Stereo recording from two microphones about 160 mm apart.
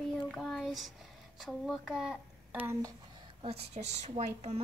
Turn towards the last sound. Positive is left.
turn(degrees=-45)  # may be behind; listen again after turning